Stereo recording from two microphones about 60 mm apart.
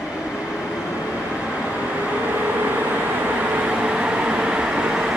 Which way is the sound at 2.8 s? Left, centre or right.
Right.